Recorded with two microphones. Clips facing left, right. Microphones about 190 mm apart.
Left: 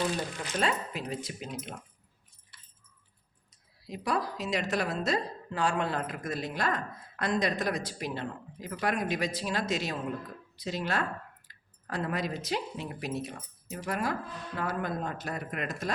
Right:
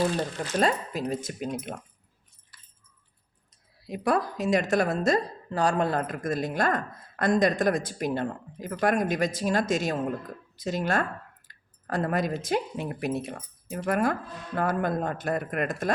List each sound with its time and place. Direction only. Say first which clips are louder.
0.0 s a woman's voice: right 5 dB; 40° right (ahead or behind)
2.5 s keys jangling: even; 25° left (ahead or behind)
3.8 s a woman's voice: right 6 dB; 55° right (ahead or behind)